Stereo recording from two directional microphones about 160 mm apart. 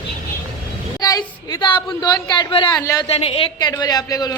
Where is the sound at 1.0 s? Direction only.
20° left (ahead or behind).